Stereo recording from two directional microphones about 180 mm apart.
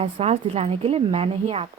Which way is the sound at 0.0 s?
35° right (ahead or behind).